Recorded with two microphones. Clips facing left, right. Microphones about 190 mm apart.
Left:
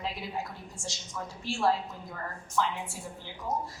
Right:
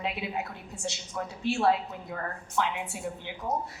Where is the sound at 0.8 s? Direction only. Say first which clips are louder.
Right 8 dB; 65° right (ahead or behind).